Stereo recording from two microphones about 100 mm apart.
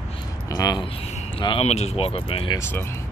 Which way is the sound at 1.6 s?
90° left.